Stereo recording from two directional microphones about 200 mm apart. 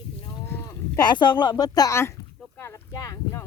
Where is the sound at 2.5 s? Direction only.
10° left (ahead or behind).